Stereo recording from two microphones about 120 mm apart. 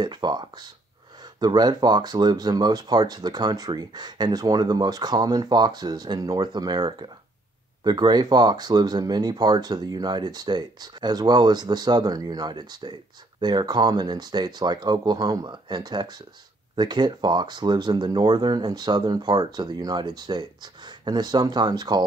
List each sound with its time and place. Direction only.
0.0 s speech: 35° right (ahead or behind)